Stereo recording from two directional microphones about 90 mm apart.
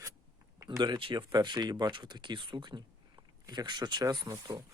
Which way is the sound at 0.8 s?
65° right (ahead or behind).